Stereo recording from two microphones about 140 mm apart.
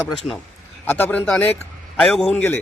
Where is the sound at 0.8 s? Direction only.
15° left (ahead or behind).